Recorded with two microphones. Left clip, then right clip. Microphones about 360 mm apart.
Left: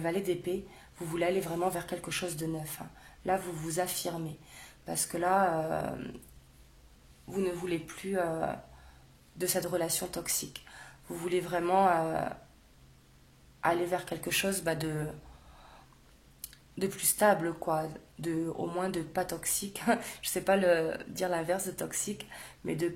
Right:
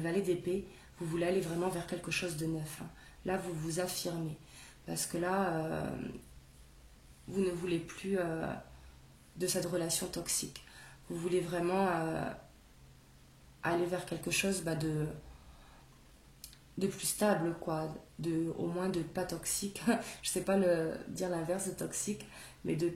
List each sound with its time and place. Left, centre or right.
0.0 s speech: left
7.3 s speech: centre
13.6 s speech: left
16.3 s speech: left